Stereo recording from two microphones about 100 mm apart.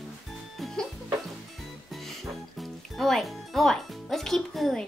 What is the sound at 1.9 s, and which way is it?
Music, centre (ahead or behind).